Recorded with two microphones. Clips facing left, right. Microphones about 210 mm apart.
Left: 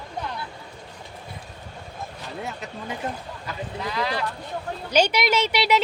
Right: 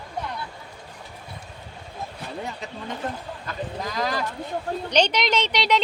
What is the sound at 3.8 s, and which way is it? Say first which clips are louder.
Speech: left 1 dB; 45° right (ahead or behind).